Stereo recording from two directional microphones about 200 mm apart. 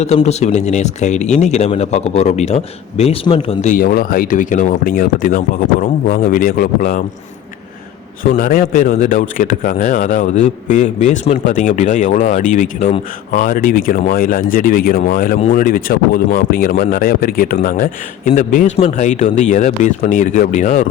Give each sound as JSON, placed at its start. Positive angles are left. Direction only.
{"t": 0.0, "sound": "a man's voice", "side_deg": 35}
{"t": 8.2, "sound": "a man's voice", "side_deg": 45}